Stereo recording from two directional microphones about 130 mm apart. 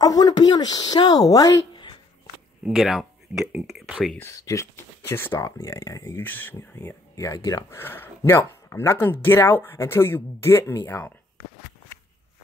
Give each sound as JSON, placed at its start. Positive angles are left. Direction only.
{"t": 0.0, "sound": "speech", "side_deg": 30}
{"t": 2.6, "sound": "speech", "side_deg": 0}
{"t": 4.2, "sound": "speech", "side_deg": 25}
{"t": 7.2, "sound": "speech", "side_deg": 30}
{"t": 7.8, "sound": "speech", "side_deg": 15}
{"t": 10.9, "sound": "a sound", "side_deg": 15}